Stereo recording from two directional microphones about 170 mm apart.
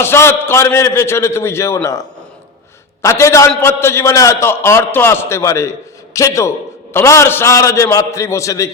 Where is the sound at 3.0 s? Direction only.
15° left (ahead or behind).